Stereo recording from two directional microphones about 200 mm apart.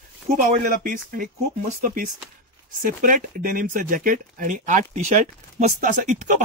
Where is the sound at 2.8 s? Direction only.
45° right (ahead or behind).